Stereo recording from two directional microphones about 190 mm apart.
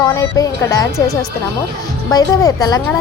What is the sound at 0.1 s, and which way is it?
A woman's voice, 20° left (ahead or behind).